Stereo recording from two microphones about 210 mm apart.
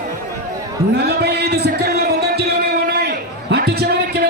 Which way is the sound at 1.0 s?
50° right (ahead or behind).